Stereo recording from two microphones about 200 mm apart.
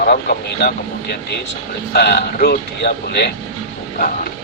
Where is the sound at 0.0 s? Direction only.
50° left (ahead or behind).